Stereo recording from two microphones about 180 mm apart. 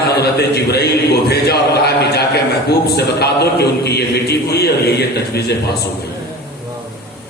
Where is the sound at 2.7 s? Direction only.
65° left (ahead or behind).